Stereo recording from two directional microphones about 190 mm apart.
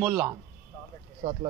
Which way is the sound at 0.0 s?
20° right (ahead or behind).